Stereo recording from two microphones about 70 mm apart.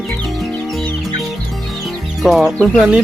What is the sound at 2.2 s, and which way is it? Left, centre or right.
Speech, centre.